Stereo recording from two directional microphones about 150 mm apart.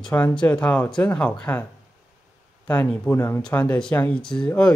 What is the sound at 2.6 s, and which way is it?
Speech, 10° left (ahead or behind).